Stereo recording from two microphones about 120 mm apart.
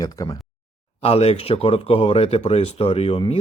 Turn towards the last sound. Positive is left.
turn(degrees=55)  # may be behind; listen again after turning